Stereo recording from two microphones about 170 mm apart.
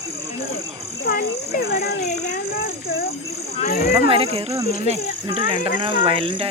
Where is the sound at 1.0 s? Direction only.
55° left (ahead or behind).